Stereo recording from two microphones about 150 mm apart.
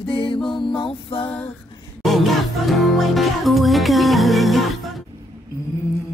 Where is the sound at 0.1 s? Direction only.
35° left (ahead or behind).